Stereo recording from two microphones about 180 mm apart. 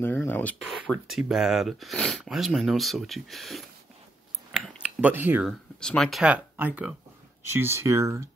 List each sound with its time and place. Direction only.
0.0 s speech: 10° left (ahead or behind)
4.5 s mechanisms: 5° right (ahead or behind)
5.5 s speech: 5° left (ahead or behind); by 8.2 s 15° right (ahead or behind)